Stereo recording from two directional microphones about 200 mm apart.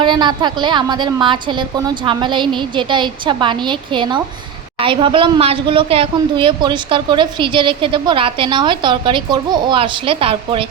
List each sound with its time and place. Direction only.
0.0 s speech: 20° right (ahead or behind)